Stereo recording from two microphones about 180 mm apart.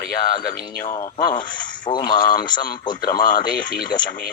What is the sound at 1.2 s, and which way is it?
Speech, 25° left (ahead or behind).